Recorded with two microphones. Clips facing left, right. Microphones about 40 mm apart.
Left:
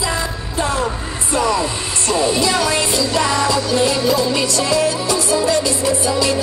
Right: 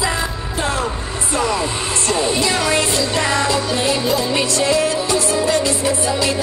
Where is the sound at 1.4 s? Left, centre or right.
Centre.